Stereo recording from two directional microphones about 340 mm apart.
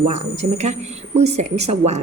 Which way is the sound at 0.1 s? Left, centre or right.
Centre.